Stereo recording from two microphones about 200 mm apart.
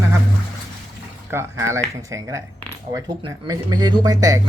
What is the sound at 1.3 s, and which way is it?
Speech, 15° right (ahead or behind).